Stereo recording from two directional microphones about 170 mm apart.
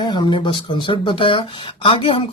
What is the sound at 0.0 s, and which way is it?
Speech, 25° left (ahead or behind).